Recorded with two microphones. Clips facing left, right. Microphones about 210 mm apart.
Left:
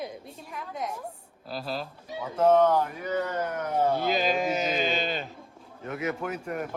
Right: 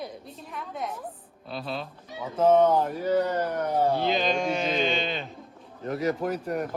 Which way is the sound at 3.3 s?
35° right (ahead or behind).